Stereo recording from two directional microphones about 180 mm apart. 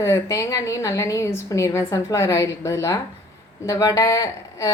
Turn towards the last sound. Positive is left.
turn(degrees=20)  # may be behind; listen again after turning